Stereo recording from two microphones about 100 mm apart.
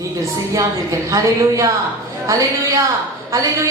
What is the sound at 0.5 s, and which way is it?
A woman's voice, 35° right (ahead or behind).